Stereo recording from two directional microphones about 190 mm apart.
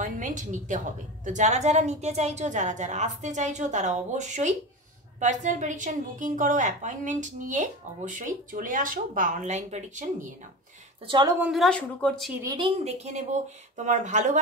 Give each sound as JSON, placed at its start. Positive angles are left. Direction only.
{"t": 0.0, "sound": "a woman's voice", "side_deg": -40}
{"t": 11.1, "sound": "a woman's voice", "side_deg": -25}
{"t": 11.3, "sound": "speech", "side_deg": -5}
{"t": 12.4, "sound": "a woman's voice", "side_deg": -30}